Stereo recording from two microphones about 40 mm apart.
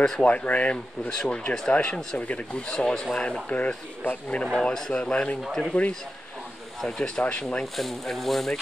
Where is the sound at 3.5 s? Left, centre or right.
Left.